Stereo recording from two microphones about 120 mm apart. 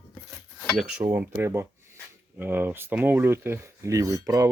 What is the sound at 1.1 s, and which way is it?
Speech, 15° right (ahead or behind).